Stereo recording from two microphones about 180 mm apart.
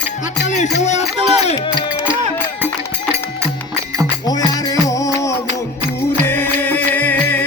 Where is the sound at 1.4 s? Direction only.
25° left (ahead or behind).